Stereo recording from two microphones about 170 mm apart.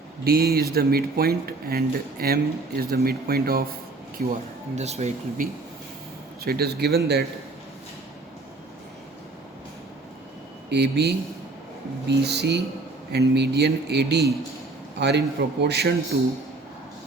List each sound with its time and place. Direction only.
0.3 s speech: 65° right (ahead or behind)
4.7 s speech: 40° right (ahead or behind)
6.4 s speech: 65° right (ahead or behind)
10.7 s speech: 75° right (ahead or behind)
16.1 s speech: 65° right (ahead or behind)